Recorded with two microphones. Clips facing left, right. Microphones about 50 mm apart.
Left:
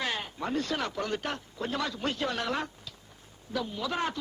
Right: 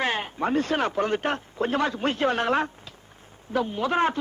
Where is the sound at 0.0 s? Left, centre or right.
Right.